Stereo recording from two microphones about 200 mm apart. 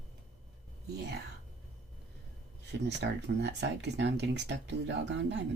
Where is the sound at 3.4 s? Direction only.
60° right (ahead or behind).